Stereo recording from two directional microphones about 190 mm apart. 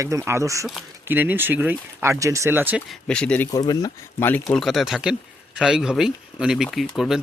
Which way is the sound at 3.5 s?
20° left (ahead or behind).